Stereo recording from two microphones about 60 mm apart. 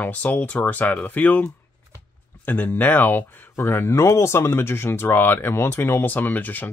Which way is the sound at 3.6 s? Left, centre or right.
Left.